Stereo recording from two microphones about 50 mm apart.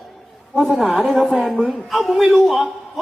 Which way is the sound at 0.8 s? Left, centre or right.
Centre.